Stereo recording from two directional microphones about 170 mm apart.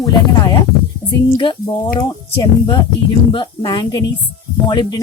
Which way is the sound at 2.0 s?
25° left (ahead or behind).